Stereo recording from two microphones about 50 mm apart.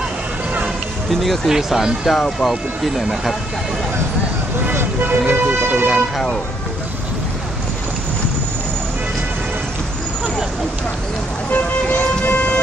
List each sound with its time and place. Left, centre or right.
1.1 s speech: centre
1.5 s speech: centre
2.1 s speech: centre
4.7 s vehicle: right
5.3 s speech: right
5.9 s speech: centre
11.5 s vehicle: left